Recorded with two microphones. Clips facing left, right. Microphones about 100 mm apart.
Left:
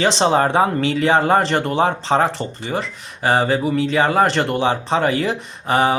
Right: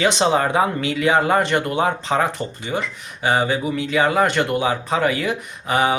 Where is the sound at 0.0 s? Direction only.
35° left (ahead or behind).